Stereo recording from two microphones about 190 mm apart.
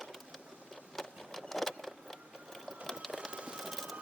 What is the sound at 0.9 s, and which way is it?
Vehicle, centre (ahead or behind).